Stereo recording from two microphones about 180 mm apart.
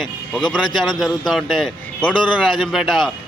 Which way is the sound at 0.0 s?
5° left (ahead or behind).